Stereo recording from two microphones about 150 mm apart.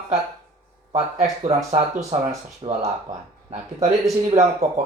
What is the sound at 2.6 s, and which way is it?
Speech, 35° right (ahead or behind).